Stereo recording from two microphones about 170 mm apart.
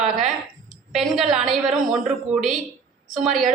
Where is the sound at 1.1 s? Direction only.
Centre (ahead or behind).